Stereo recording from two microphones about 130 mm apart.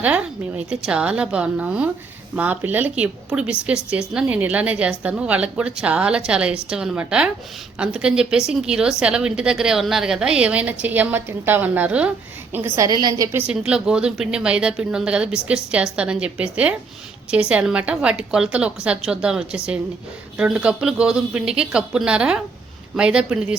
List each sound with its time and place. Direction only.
0.0 s a woman's voice: 10° right (ahead or behind)
12.5 s a woman's voice: 20° right (ahead or behind)
13.3 s a woman's voice: 10° right (ahead or behind)